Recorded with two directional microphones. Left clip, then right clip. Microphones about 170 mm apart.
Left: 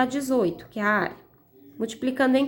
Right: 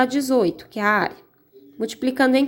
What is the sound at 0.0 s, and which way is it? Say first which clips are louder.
A woman's voice: right 5 dB; 30° right (ahead or behind).